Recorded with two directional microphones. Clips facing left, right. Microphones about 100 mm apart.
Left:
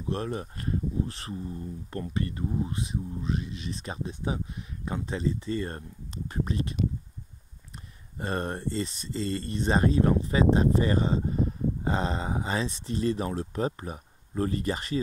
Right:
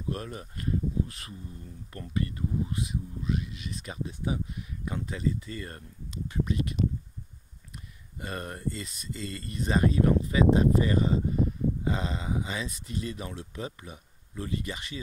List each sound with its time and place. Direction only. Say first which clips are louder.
0.1 s speech: left 5 dB; 30° left (ahead or behind)
8.2 s speech: left 6 dB; 30° left (ahead or behind)